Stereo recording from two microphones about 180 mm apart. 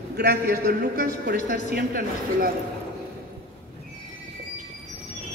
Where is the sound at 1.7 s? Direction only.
55° right (ahead or behind).